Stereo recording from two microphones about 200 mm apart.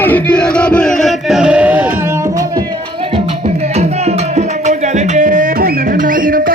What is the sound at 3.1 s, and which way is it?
Music, 30° right (ahead or behind).